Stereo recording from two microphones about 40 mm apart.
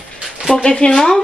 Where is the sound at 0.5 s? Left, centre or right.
Centre.